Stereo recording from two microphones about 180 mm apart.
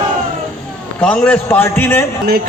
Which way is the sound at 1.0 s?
5° left (ahead or behind).